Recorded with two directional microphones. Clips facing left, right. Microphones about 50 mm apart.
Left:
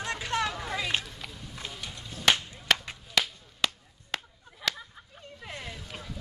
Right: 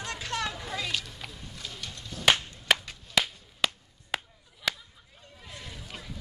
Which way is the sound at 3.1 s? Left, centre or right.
Centre.